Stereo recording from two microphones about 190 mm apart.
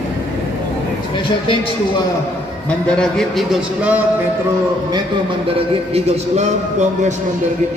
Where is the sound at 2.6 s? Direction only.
5° left (ahead or behind).